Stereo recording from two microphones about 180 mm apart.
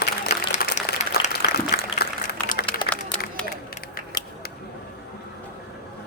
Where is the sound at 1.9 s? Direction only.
60° left (ahead or behind).